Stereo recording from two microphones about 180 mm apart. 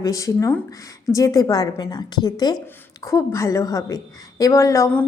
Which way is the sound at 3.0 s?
15° left (ahead or behind).